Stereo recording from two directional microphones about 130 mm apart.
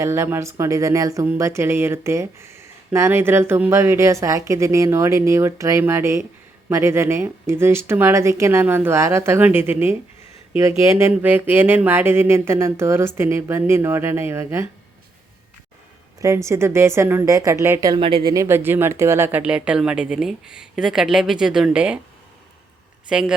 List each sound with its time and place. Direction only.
0.0 s speech: 20° right (ahead or behind)
16.2 s speech: 20° right (ahead or behind)
18.0 s speech: 40° right (ahead or behind)
18.3 s speech: 20° right (ahead or behind)
19.4 s a woman's voice: 10° right (ahead or behind)
23.0 s speech: 5° right (ahead or behind)